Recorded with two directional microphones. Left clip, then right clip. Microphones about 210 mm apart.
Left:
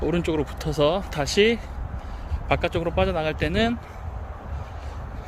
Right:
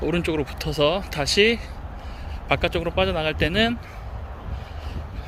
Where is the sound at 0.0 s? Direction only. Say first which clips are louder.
Even; 10° left (ahead or behind).